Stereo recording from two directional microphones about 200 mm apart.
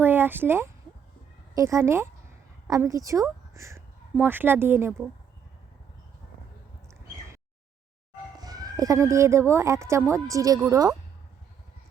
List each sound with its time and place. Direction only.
0.0 s a woman's voice: 10° right (ahead or behind)
8.4 s a woman's voice: 20° right (ahead or behind)